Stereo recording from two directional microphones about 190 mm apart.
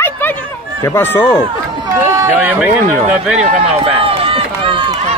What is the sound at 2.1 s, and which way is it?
Speech, 10° right (ahead or behind).